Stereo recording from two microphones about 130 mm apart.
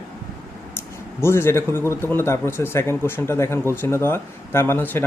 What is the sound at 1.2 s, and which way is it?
A man's voice, 20° left (ahead or behind).